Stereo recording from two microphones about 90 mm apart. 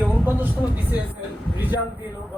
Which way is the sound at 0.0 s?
20° right (ahead or behind).